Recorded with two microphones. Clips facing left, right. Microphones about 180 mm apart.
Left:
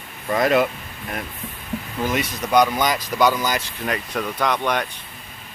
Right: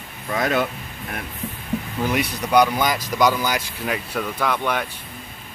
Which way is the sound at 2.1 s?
10° right (ahead or behind).